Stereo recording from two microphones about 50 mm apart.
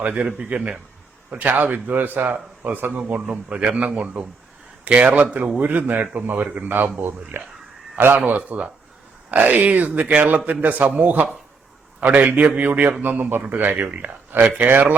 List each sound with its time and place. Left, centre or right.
0.0 s a man's voice: right
8.4 s a man's voice: right
9.3 s a man's voice: right